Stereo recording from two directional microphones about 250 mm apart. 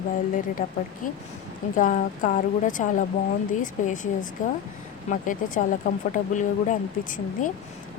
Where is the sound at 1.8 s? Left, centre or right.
Left.